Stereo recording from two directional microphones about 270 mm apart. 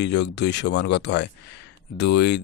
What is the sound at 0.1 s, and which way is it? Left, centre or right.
Speech, left.